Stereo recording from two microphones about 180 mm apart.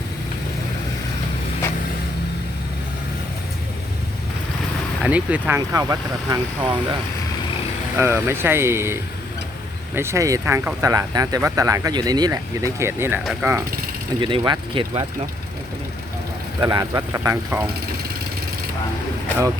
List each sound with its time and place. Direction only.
5.0 s speech: 10° right (ahead or behind)
7.9 s speech: 15° right (ahead or behind)
14.2 s speech: 25° right (ahead or behind)
16.6 s speech: 20° right (ahead or behind)